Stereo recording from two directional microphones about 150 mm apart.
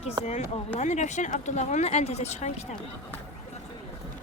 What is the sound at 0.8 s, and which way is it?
Speech, 50° left (ahead or behind).